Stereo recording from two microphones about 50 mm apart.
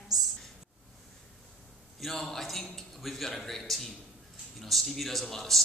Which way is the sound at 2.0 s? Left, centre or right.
Centre.